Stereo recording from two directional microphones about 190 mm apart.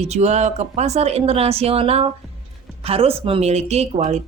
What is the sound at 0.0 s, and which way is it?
Speech, 35° right (ahead or behind).